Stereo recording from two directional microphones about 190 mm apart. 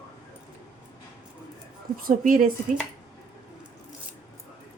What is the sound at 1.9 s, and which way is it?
Speech, 50° right (ahead or behind).